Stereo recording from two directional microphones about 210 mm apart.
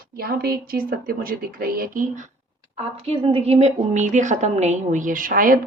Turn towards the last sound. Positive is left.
turn(degrees=-40)  # may be behind; listen again after turning